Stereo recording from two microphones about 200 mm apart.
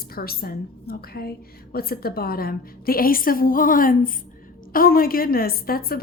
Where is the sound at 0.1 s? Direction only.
50° left (ahead or behind).